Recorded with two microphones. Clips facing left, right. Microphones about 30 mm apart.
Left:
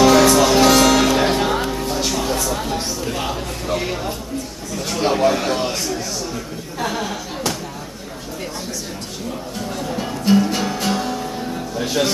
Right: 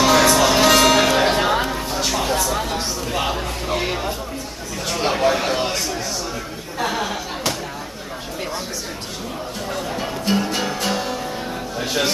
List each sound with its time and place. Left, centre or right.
0.0 s music: centre
2.5 s a sound: centre
9.7 s music: centre